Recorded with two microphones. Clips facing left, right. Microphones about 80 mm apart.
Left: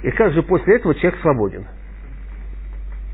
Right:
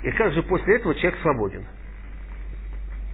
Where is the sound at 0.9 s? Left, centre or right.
Left.